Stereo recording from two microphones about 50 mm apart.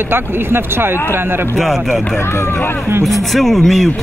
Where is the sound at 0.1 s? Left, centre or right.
Right.